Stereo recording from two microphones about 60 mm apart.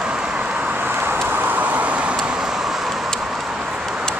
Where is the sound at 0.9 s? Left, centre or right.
Right.